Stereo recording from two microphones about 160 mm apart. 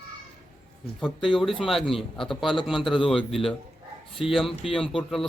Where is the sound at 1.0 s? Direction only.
Centre (ahead or behind).